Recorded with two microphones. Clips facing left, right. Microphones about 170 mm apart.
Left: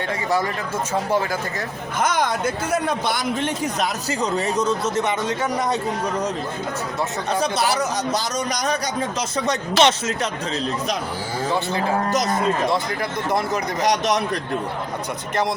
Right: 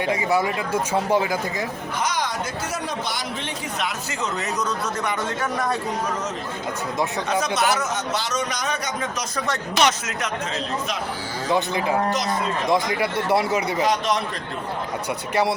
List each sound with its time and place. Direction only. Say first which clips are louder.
0.1 s speech: right 1 dB; 10° right (ahead or behind)
2.0 s a man's voice: left 5 dB; 50° left (ahead or behind); by 5.7 s 20° left (ahead or behind)
7.3 s a man's voice: left 1 dB; 30° left (ahead or behind)
9.5 s speech: left 3 dB; 25° left (ahead or behind)
11.5 s speech: right 2 dB; 15° right (ahead or behind)